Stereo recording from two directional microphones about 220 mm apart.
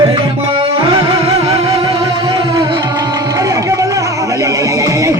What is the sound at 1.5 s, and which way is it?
Music, 15° right (ahead or behind).